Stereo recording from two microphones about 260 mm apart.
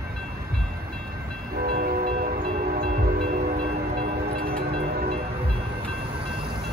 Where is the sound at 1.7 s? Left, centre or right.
Right.